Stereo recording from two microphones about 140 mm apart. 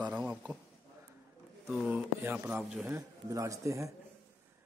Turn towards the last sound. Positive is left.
turn(degrees=-20)  # may be behind; listen again after turning